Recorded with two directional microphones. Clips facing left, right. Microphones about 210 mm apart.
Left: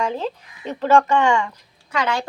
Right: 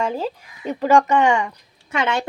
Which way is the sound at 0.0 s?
5° right (ahead or behind).